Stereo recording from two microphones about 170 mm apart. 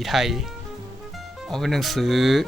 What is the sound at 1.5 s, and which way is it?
Speech, centre (ahead or behind).